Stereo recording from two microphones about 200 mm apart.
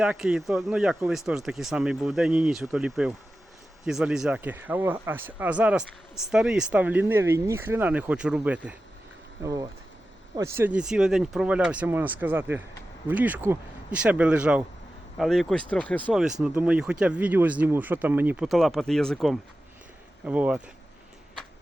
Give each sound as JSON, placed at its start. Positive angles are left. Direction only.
{"t": 0.0, "sound": "speech", "side_deg": -5}
{"t": 9.4, "sound": "speech", "side_deg": -15}
{"t": 16.4, "sound": "speech", "side_deg": -5}